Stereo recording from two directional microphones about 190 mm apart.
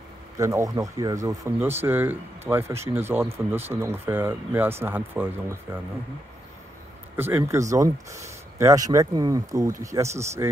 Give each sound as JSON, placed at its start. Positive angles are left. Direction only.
{"t": 0.4, "sound": "speech", "side_deg": -15}
{"t": 7.2, "sound": "speech", "side_deg": -10}